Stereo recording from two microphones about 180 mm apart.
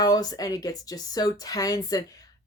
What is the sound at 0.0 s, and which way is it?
A woman's voice, 20° left (ahead or behind).